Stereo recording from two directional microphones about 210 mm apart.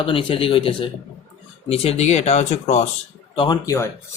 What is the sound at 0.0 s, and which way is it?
Speech, 25° left (ahead or behind).